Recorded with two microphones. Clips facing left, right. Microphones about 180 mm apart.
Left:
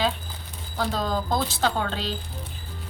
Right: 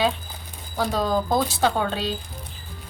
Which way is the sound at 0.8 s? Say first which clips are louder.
Right 4 dB; 15° right (ahead or behind).